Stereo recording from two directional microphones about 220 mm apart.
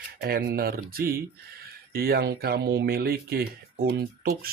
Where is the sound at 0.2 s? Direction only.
45° right (ahead or behind).